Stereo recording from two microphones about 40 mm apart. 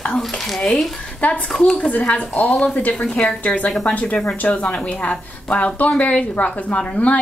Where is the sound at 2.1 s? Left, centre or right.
Left.